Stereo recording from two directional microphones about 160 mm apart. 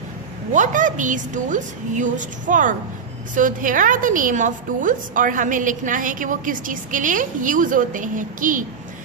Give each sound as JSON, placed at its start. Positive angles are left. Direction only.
{"t": 0.5, "sound": "a woman's voice", "side_deg": -55}